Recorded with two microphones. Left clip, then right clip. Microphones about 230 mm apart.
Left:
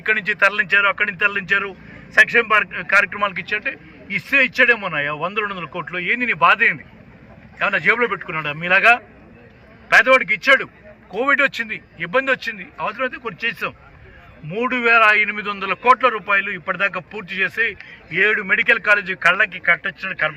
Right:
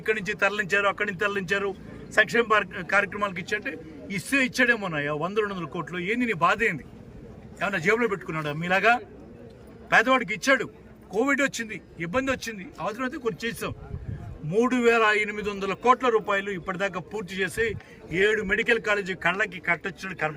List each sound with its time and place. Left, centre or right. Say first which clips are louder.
0.0 s a man's voice: left 8 dB; centre